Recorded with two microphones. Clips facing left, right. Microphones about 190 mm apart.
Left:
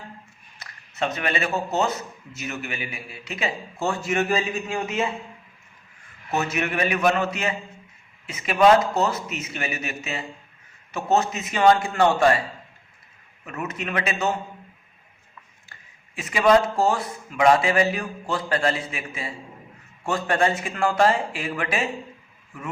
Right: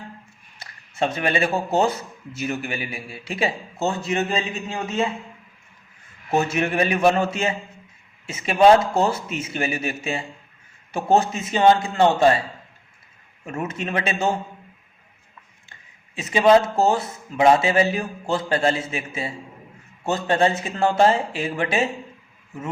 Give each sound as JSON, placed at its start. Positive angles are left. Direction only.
{"t": 0.6, "sound": "speech", "side_deg": -30}
{"t": 6.3, "sound": "a man's voice", "side_deg": -30}
{"t": 13.4, "sound": "a man's voice", "side_deg": -25}
{"t": 16.3, "sound": "a man's voice", "side_deg": -25}